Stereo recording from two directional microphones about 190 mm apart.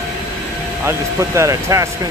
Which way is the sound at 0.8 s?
15° right (ahead or behind).